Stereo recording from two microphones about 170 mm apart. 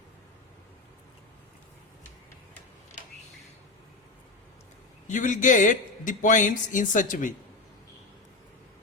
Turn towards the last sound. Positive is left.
turn(degrees=50)  # may be behind; listen again after turning